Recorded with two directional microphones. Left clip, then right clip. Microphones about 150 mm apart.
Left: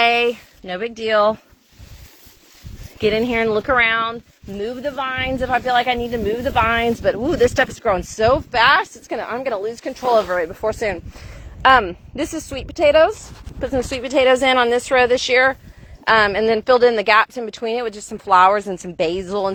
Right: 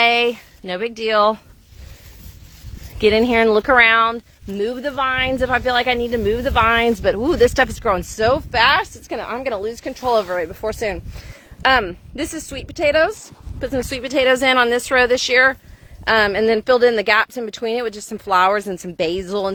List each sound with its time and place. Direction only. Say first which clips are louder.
0.0 s speech: right 1 dB; 30° right (ahead or behind)
3.0 s speech: right 4 dB; 45° right (ahead or behind)
7.9 s speech: left 2 dB; 10° right (ahead or behind)
10.5 s a woman's voice: left 2 dB; 5° right (ahead or behind)
11.6 s speech: left 3 dB; 20° right (ahead or behind)
12.1 s a woman's voice: left 3 dB; centre (ahead or behind)
13.7 s a woman's voice: left 1 dB; 25° right (ahead or behind); by 16.4 s 40° right (ahead or behind)
16.4 s a woman's voice: even; 55° right (ahead or behind)